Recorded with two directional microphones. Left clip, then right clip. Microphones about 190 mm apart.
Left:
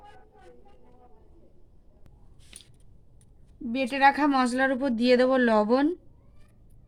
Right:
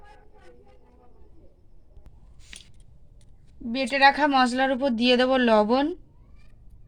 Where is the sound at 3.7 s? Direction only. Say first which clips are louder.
Right 2 dB; 20° right (ahead or behind).